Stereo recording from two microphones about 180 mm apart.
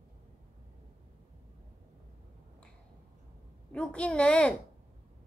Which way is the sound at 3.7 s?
5° left (ahead or behind).